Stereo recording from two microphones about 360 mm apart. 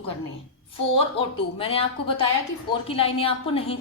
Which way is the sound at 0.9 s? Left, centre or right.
Centre.